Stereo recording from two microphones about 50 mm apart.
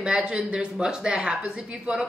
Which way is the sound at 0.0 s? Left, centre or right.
Centre.